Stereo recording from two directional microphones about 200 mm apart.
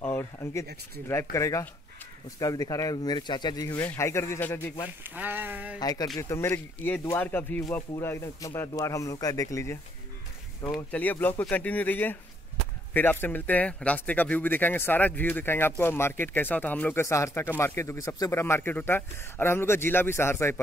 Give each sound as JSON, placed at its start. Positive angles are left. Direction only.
{"t": 0.0, "sound": "a sound", "side_deg": 10}
{"t": 1.3, "sound": "speech", "side_deg": 15}
{"t": 5.0, "sound": "speech", "side_deg": -10}
{"t": 5.8, "sound": "speech", "side_deg": 20}
{"t": 10.9, "sound": "speech", "side_deg": 10}